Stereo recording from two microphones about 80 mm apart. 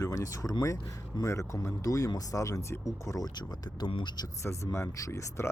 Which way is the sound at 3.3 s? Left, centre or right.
Left.